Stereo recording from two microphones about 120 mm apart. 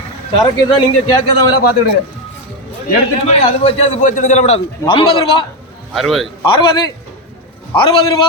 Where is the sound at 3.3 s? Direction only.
65° left (ahead or behind).